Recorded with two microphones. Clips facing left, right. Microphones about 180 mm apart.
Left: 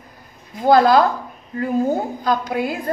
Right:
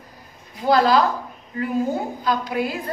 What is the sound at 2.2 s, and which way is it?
Speech, 50° left (ahead or behind).